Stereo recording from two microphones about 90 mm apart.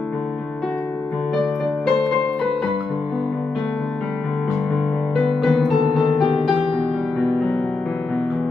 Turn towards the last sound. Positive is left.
turn(degrees=5)  # may be behind; listen again after turning